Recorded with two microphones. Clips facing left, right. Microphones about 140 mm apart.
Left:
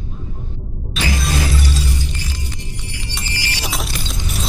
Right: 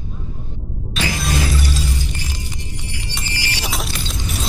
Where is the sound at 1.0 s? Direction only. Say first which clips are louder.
Even; centre (ahead or behind).